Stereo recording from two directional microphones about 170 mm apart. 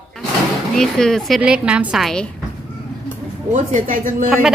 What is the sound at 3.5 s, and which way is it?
Speech, 50° right (ahead or behind).